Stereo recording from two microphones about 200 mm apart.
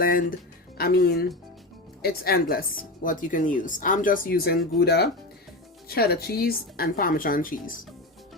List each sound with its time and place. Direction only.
0.0 s a woman's voice: 45° left (ahead or behind)